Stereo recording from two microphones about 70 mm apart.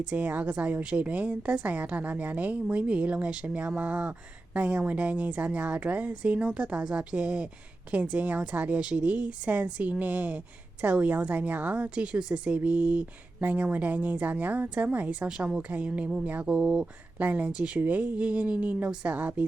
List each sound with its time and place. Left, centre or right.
0.1 s speech: right